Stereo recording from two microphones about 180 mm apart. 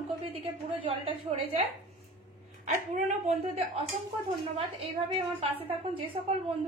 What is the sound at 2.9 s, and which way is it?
Speech, 35° right (ahead or behind).